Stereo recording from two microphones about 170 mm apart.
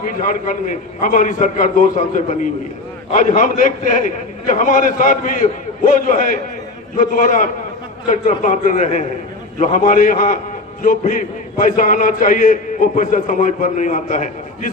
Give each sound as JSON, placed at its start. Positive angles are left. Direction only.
{"t": 0.1, "sound": "a man's voice", "side_deg": 50}